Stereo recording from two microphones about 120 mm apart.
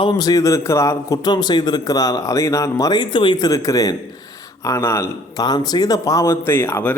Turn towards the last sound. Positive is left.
turn(degrees=15)  # may be behind; listen again after turning